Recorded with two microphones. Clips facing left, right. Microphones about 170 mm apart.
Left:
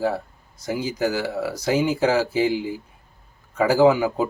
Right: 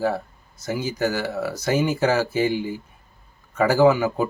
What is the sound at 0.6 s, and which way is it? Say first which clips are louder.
Speech: even; 15° left (ahead or behind).